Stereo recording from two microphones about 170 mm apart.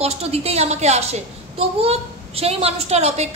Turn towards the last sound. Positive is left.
turn(degrees=-40)  # may be behind; listen again after turning